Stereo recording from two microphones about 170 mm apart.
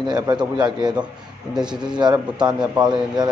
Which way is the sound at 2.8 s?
25° right (ahead or behind).